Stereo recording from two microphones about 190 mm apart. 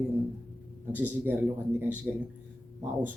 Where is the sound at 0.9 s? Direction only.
10° right (ahead or behind).